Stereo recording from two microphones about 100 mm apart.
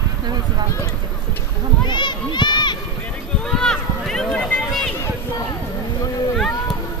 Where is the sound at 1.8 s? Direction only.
50° left (ahead or behind).